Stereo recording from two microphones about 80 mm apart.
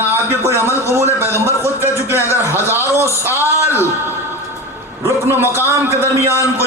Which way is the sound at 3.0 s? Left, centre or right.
Left.